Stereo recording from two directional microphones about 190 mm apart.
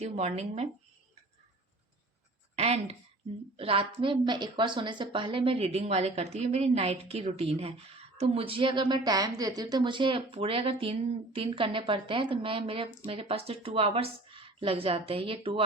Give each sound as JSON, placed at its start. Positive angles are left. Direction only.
{"t": 0.0, "sound": "speech", "side_deg": -35}
{"t": 2.6, "sound": "a woman's voice", "side_deg": -35}